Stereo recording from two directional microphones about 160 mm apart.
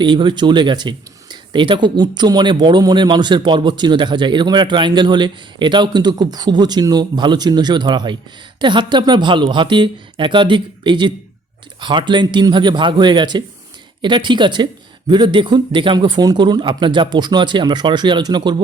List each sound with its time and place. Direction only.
0.0 s speech: 30° right (ahead or behind)